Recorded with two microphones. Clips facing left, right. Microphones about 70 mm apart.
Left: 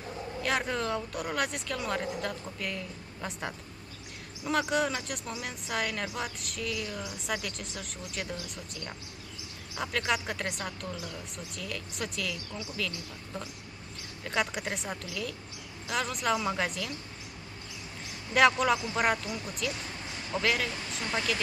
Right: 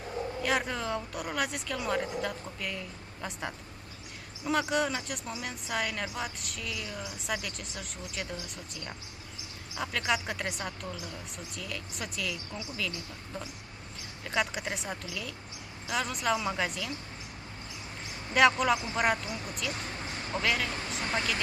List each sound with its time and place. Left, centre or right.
0.4 s speech: centre
9.8 s speech: centre
18.3 s speech: centre
20.3 s speech: right